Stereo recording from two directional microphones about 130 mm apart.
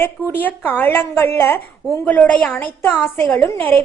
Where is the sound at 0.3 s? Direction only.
15° left (ahead or behind).